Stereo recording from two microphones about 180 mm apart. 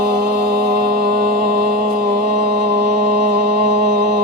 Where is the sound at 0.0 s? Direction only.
60° right (ahead or behind).